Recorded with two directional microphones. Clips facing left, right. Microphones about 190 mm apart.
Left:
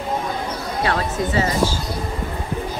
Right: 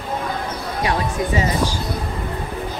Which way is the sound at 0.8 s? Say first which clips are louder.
Right 1 dB; 15° right (ahead or behind).